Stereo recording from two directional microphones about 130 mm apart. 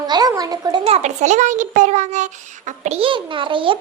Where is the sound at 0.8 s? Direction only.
55° right (ahead or behind).